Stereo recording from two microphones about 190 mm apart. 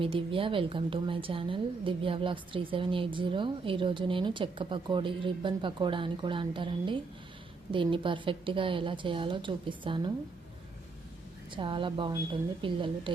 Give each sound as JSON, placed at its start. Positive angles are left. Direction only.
{"t": 0.0, "sound": "a woman's voice", "side_deg": -30}
{"t": 11.5, "sound": "a woman's voice", "side_deg": -25}